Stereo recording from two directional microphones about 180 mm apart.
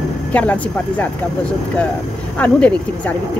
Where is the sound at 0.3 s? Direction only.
10° left (ahead or behind).